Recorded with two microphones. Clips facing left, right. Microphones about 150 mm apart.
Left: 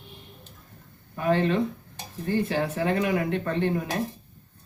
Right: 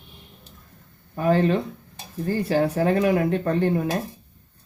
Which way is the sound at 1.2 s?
40° right (ahead or behind).